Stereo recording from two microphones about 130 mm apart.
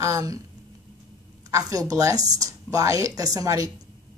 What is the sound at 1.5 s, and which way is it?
A woman's voice, 25° right (ahead or behind).